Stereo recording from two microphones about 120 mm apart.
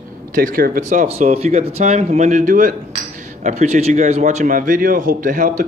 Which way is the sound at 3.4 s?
70° right (ahead or behind).